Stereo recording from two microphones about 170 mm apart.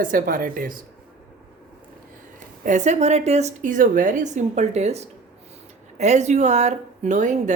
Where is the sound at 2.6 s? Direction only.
45° right (ahead or behind).